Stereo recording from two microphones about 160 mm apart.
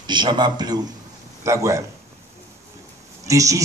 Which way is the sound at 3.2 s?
20° right (ahead or behind).